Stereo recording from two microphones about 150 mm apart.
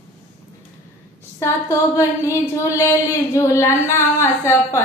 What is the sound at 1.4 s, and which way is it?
Female singing, 20° left (ahead or behind).